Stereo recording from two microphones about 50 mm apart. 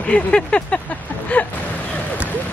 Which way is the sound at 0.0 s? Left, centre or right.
Left.